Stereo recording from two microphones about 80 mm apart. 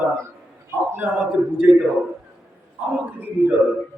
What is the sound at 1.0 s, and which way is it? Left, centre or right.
Speech, centre.